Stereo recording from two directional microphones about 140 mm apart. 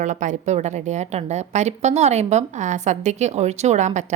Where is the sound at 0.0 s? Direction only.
60° right (ahead or behind).